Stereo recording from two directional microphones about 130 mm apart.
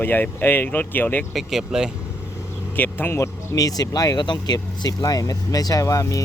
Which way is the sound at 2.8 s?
15° left (ahead or behind).